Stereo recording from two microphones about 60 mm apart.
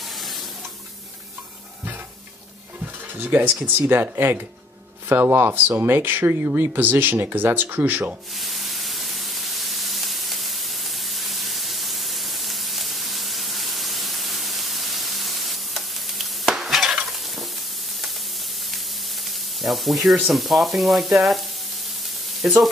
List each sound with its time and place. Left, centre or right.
2.8 s stir: right
3.9 s speech: right
8.4 s spray: centre
19.2 s speech: centre